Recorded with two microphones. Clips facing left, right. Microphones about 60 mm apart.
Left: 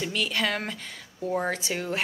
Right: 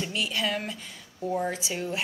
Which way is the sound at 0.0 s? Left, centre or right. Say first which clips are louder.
Left 2 dB; left.